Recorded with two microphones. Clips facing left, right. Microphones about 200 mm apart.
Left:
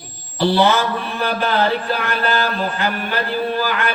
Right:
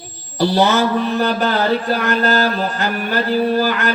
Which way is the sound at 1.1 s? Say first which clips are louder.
Right 3 dB; 40° right (ahead or behind).